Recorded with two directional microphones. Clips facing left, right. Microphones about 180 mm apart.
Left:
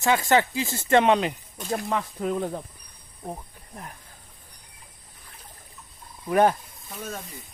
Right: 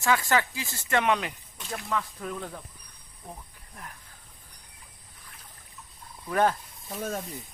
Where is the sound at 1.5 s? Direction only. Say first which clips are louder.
Left 8 dB; 40° left (ahead or behind).